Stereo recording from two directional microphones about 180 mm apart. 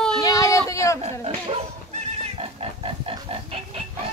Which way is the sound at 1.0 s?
35° right (ahead or behind).